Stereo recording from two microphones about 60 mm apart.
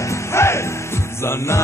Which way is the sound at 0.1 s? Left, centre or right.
Left.